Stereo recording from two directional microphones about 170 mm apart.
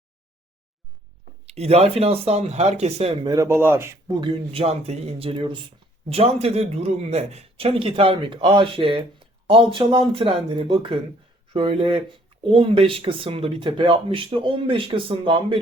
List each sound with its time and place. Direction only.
1.5 s speech: 35° right (ahead or behind)
3.2 s speech: 20° right (ahead or behind)
4.2 s speech: 35° right (ahead or behind)